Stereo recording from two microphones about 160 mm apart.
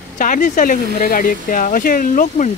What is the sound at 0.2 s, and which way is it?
Speech, 55° left (ahead or behind).